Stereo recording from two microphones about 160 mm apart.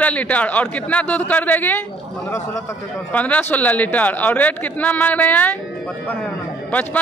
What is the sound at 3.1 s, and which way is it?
Speech, 10° left (ahead or behind).